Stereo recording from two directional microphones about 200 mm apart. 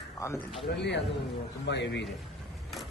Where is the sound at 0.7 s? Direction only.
60° left (ahead or behind).